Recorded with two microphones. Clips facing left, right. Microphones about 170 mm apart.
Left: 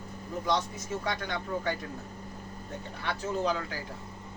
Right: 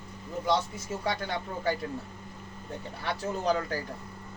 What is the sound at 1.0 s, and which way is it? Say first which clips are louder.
Speech: right 4 dB; 30° right (ahead or behind).